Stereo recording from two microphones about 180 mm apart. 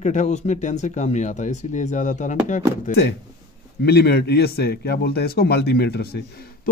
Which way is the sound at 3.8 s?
65° left (ahead or behind).